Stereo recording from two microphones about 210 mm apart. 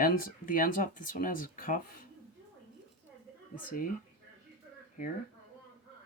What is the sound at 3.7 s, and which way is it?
Speech, 40° left (ahead or behind).